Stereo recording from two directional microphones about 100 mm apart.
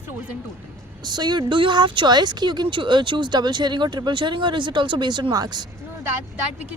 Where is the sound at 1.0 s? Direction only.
45° right (ahead or behind).